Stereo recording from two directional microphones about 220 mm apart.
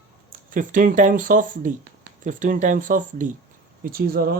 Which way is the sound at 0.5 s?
35° right (ahead or behind).